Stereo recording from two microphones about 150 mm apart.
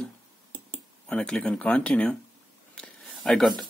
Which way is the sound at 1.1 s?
5° left (ahead or behind).